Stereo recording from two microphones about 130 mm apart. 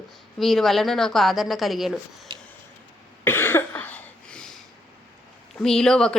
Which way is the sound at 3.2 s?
15° left (ahead or behind).